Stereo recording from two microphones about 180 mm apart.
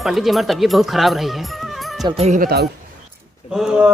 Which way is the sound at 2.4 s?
65° right (ahead or behind).